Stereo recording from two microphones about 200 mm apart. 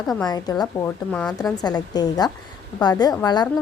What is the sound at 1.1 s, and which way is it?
Speech, 5° left (ahead or behind).